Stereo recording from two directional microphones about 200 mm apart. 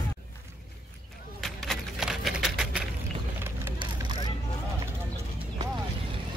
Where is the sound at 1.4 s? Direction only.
Centre (ahead or behind).